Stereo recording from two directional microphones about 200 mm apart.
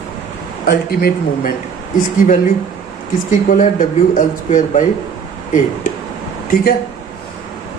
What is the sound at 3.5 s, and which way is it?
Speech, 40° left (ahead or behind).